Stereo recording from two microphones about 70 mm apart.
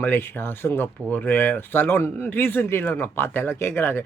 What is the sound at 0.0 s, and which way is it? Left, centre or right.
Speech, left.